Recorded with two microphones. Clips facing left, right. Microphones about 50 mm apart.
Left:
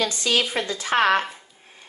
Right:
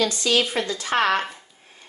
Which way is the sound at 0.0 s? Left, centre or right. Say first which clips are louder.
Right 1 dB; left.